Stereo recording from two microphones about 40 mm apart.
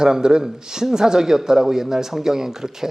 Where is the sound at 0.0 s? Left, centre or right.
Centre.